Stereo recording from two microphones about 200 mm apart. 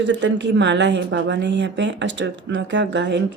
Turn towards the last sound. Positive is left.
turn(degrees=-60)  # may be behind; listen again after turning